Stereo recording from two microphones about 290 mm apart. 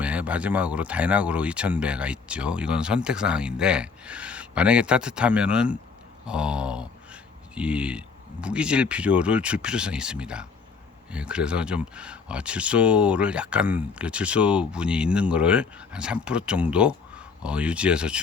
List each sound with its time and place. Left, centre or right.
0.0 s speech: centre